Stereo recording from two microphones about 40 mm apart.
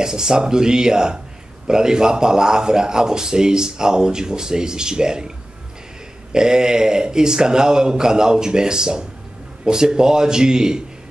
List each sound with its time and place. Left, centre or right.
0.0 s speech: centre
6.3 s speech: centre